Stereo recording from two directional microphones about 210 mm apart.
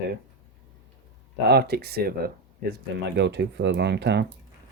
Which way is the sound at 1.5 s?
50° right (ahead or behind).